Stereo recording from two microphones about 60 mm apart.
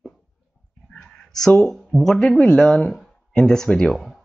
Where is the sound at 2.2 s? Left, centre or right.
Centre.